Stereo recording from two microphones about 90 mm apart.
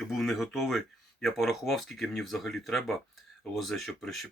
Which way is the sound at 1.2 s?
Centre (ahead or behind).